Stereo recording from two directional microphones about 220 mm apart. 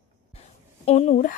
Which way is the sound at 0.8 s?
30° left (ahead or behind).